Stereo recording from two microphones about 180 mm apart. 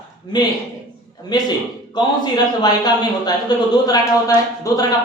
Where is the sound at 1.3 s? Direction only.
20° left (ahead or behind).